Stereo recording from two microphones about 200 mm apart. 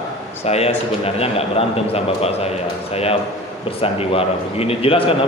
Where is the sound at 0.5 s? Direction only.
30° left (ahead or behind).